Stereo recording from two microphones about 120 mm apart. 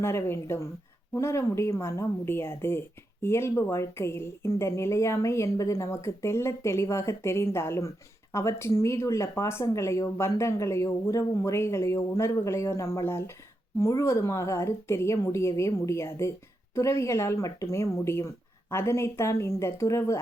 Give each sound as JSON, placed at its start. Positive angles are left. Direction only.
{"t": 0.0, "sound": "speech", "side_deg": 20}